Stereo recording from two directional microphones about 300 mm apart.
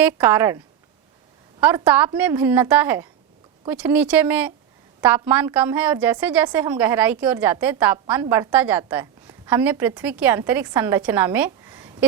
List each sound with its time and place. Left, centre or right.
0.0 s a woman's voice: centre
1.6 s a woman's voice: centre